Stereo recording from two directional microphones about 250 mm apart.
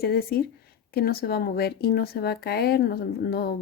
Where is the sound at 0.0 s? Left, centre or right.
Left.